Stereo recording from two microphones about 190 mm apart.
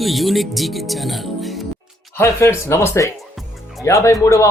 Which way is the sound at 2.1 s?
15° left (ahead or behind).